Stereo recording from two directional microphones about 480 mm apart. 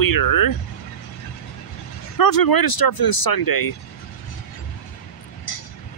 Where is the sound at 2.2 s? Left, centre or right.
Left.